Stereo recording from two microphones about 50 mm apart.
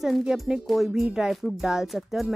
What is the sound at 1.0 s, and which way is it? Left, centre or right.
Speech, centre.